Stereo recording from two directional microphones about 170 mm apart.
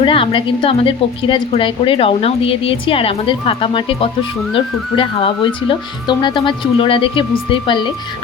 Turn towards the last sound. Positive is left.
turn(degrees=30)  # may be behind; listen again after turning